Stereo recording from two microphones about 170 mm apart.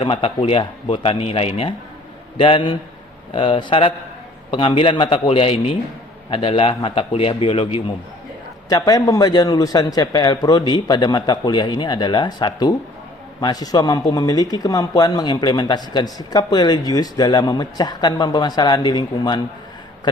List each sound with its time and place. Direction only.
0.0 s a man's voice: 35° left (ahead or behind)
8.7 s a man's voice: 25° left (ahead or behind)